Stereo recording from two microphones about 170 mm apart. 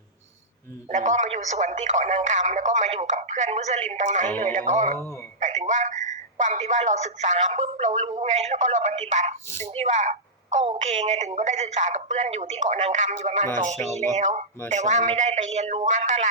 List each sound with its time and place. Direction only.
0.9 s a woman's voice: 45° right (ahead or behind)